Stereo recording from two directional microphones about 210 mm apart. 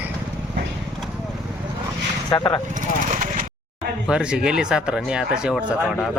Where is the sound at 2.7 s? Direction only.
40° right (ahead or behind).